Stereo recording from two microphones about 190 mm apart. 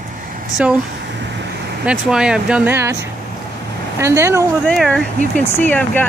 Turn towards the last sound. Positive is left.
turn(degrees=10)  # may be behind; listen again after turning